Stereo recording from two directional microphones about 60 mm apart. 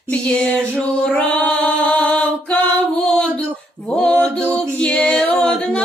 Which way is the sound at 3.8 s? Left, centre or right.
Centre.